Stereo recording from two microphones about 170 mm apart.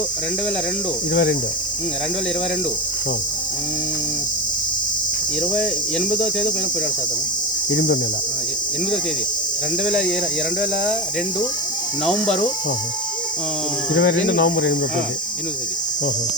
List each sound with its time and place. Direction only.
1.1 s speech: 90° left
7.7 s speech: 90° left
9.8 s speech: 5° left (ahead or behind)
13.9 s speech: 90° left